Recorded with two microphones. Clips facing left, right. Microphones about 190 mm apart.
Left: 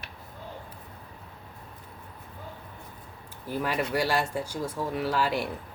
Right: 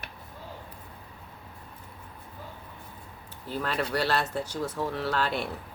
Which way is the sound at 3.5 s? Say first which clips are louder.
Left 1 dB; 10° left (ahead or behind).